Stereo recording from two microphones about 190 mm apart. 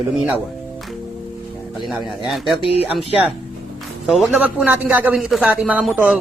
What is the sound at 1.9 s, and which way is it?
Speech, centre (ahead or behind).